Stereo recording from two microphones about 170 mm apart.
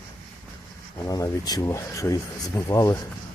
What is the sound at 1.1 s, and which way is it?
Speech, 20° left (ahead or behind).